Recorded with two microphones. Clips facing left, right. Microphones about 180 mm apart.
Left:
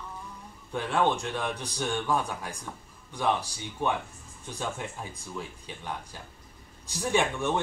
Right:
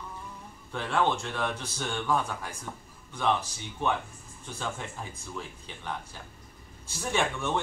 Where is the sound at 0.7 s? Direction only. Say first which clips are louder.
Left 1 dB; 15° left (ahead or behind).